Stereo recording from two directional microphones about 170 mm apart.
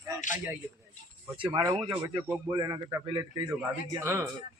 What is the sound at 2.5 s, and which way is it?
A man's voice, 20° right (ahead or behind).